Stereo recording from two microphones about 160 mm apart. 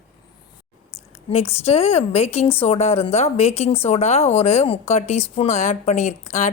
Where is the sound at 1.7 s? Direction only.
40° left (ahead or behind).